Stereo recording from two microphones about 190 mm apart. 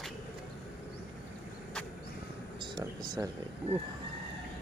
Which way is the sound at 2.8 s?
20° right (ahead or behind).